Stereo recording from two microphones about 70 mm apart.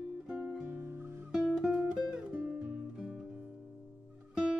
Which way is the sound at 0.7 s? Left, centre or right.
Right.